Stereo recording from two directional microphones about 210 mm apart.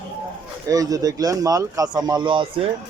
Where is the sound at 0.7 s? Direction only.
15° right (ahead or behind).